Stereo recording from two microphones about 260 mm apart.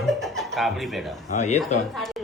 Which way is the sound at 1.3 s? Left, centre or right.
Left.